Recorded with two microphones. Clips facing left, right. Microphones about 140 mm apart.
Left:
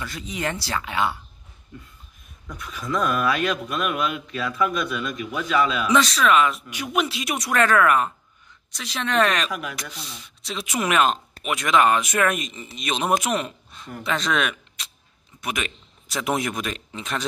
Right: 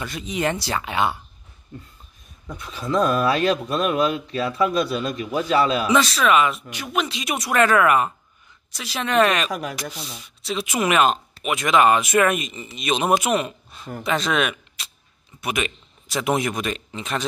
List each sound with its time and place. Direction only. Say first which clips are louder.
0.0 s speech: right 4 dB; 20° right (ahead or behind)
2.4 s speech: right 2 dB; 30° right (ahead or behind)
5.9 s speech: right 1 dB; 5° right (ahead or behind)
6.7 s speech: left 1 dB; 10° left (ahead or behind); by 9.5 s 5° right (ahead or behind)
9.5 s speech: right 3 dB; 40° right (ahead or behind)
10.1 s a man's voice: right 6 dB; 5° right (ahead or behind)